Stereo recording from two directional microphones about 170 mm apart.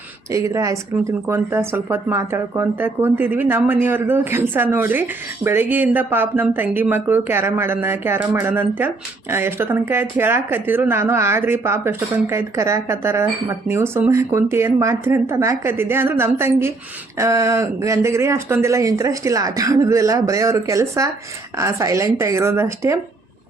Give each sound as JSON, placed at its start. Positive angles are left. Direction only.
{"t": 0.3, "sound": "speech", "side_deg": -20}